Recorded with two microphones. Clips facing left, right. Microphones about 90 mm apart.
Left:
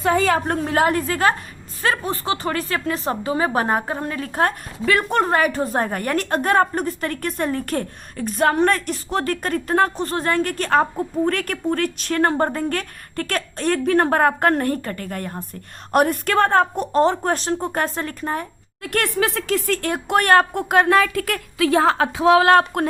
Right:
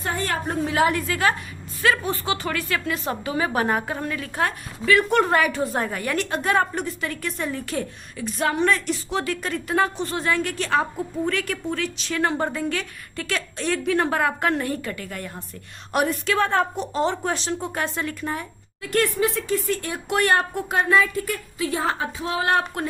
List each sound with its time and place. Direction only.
0.2 s a woman's voice: 90° left
0.5 s a woman's voice: 50° left (ahead or behind)
18.8 s speech: 60° left (ahead or behind)